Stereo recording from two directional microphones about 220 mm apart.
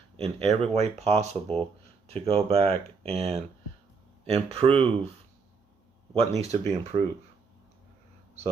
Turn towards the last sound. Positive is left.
turn(degrees=-30)  # may be behind; listen again after turning